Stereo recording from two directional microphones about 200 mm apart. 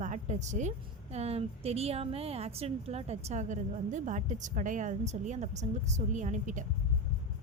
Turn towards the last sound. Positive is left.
turn(degrees=-40)  # may be behind; listen again after turning